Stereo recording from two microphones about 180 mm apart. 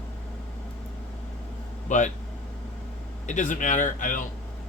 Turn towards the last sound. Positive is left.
turn(degrees=45)  # may be behind; listen again after turning